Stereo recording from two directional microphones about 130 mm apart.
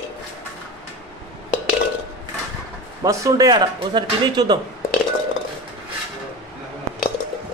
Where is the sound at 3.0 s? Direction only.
25° right (ahead or behind).